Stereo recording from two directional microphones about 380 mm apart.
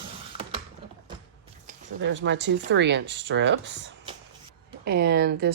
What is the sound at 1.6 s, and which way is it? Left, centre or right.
Speech, right.